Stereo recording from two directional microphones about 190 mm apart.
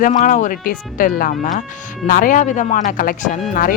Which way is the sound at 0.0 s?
40° left (ahead or behind).